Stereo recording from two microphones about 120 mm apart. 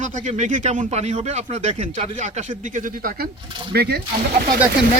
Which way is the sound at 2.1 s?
80° right.